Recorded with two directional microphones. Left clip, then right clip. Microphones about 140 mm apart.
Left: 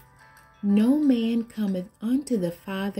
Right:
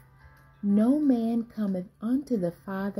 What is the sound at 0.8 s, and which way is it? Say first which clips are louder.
Speech: left 2 dB; 45° left (ahead or behind).